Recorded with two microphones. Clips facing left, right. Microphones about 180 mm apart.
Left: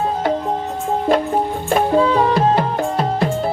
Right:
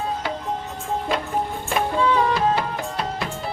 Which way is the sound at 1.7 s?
40° left (ahead or behind).